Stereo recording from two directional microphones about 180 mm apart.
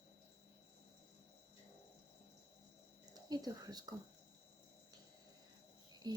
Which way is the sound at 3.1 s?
20° right (ahead or behind).